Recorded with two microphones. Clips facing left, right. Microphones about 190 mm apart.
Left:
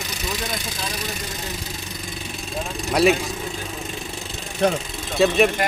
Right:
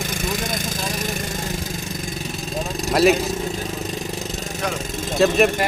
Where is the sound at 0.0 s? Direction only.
50° right (ahead or behind).